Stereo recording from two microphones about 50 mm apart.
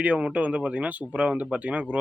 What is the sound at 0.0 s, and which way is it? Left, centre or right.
Speech, right.